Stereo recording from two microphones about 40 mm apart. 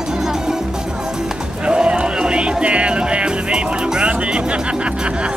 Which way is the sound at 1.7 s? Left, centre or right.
Right.